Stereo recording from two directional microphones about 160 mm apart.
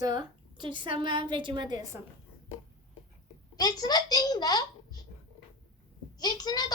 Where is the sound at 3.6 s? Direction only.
25° left (ahead or behind).